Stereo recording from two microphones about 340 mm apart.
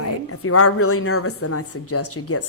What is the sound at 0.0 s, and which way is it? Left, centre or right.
A woman's voice, left.